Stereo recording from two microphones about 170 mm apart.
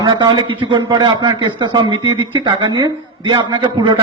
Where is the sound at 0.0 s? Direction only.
25° right (ahead or behind).